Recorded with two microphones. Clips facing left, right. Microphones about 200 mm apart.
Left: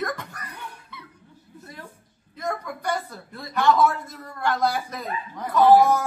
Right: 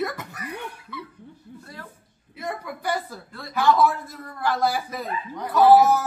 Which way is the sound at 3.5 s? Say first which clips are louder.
Even; centre (ahead or behind).